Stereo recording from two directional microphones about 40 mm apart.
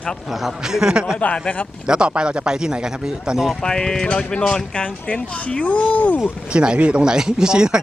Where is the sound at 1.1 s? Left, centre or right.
Left.